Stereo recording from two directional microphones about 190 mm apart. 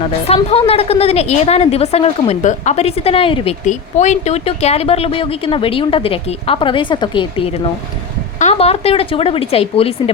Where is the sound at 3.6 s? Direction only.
40° left (ahead or behind).